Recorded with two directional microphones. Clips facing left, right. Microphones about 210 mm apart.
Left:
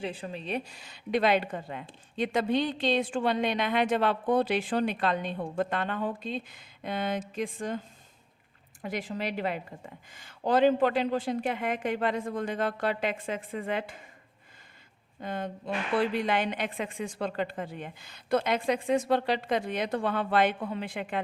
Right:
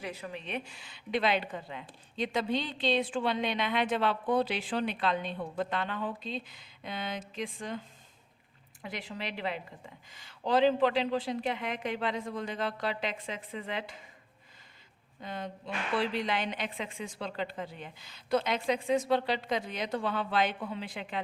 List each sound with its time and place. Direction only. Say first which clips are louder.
0.0 s a woman's voice: left 4 dB; 30° left (ahead or behind); by 7.8 s 45° left (ahead or behind)
8.8 s a woman's voice: left 6 dB; 45° left (ahead or behind)
15.2 s a woman's voice: left 5 dB; 50° left (ahead or behind)